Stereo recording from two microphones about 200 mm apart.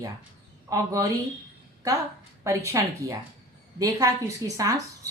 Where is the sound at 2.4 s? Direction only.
15° right (ahead or behind).